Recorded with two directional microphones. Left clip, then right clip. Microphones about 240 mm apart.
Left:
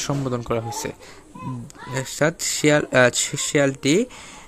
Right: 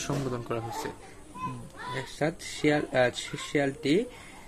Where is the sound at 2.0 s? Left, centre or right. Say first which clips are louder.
Left 10 dB; left.